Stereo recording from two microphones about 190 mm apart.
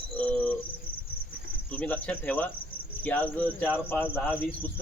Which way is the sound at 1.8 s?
10° left (ahead or behind).